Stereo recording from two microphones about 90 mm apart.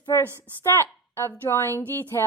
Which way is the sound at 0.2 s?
30° left (ahead or behind).